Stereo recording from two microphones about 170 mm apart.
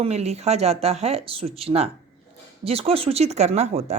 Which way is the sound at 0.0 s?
40° right (ahead or behind).